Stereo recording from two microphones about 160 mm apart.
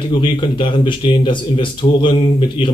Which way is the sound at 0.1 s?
30° left (ahead or behind).